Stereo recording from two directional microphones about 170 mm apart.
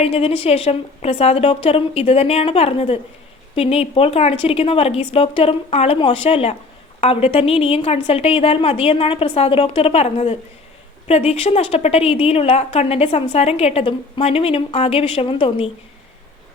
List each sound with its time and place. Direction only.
0.0 s a woman's voice: 35° left (ahead or behind)